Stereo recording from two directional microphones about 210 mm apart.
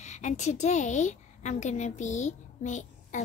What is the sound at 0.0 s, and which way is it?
A woman's voice, 35° left (ahead or behind).